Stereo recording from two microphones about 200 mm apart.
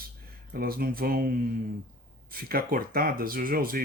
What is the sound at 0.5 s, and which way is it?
Speech, 50° right (ahead or behind).